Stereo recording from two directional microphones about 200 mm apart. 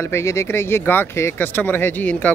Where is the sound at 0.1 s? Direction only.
15° left (ahead or behind).